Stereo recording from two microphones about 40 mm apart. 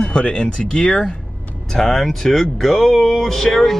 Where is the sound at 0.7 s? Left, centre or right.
Centre.